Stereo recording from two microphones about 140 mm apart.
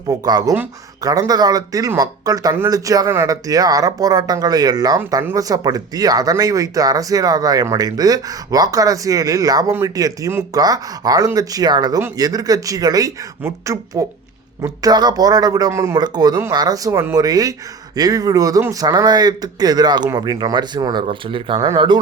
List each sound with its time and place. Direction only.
0.1 s speech: 25° right (ahead or behind)